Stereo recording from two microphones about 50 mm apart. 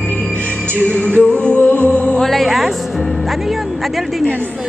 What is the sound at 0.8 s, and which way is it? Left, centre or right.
Music, left.